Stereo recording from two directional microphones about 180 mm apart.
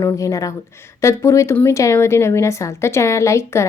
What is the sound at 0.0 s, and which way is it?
A woman's voice, 20° left (ahead or behind).